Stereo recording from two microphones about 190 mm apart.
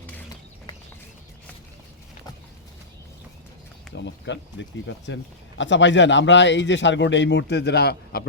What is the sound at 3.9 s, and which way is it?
A man's voice, 70° left (ahead or behind).